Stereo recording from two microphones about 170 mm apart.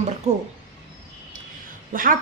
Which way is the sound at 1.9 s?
55° right (ahead or behind).